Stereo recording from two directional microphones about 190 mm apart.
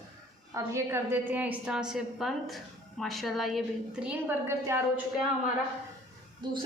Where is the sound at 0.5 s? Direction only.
15° right (ahead or behind).